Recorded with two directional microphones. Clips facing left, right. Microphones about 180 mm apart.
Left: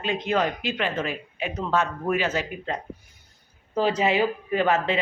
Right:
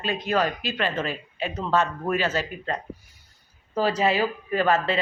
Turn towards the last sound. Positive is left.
turn(degrees=15)  # may be behind; listen again after turning